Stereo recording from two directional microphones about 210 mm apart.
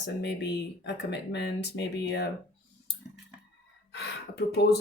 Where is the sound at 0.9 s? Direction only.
55° left (ahead or behind).